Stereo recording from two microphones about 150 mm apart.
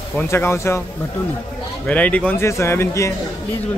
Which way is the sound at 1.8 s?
10° left (ahead or behind).